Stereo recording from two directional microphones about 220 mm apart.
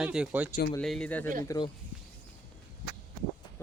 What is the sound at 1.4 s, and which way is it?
Speech, 20° left (ahead or behind).